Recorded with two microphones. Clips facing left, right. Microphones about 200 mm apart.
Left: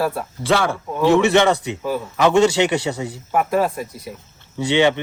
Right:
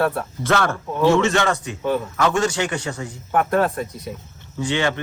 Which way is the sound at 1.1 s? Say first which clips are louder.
Left 4 dB; 20° left (ahead or behind).